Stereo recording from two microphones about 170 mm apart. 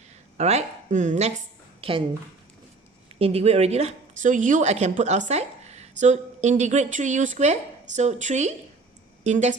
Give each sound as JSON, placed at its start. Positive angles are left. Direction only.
{"t": 0.3, "sound": "speech", "side_deg": -40}
{"t": 1.8, "sound": "a woman's voice", "side_deg": -30}
{"t": 3.2, "sound": "speech", "side_deg": -35}